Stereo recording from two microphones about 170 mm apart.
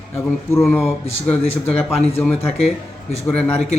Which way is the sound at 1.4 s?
40° left (ahead or behind).